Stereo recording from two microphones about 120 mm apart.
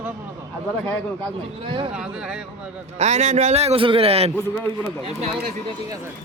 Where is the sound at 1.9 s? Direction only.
10° right (ahead or behind).